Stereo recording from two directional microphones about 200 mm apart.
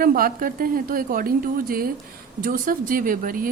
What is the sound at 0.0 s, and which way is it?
Speech, 45° right (ahead or behind).